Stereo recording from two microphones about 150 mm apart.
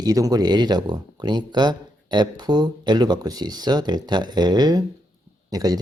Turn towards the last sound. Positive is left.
turn(degrees=-25)  # may be behind; listen again after turning